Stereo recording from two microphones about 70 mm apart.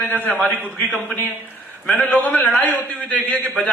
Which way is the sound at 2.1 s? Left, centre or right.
Left.